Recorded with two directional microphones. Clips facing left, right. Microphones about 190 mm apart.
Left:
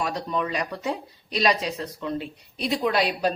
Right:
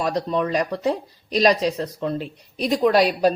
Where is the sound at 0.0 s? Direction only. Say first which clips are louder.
Right 5 dB; 35° right (ahead or behind).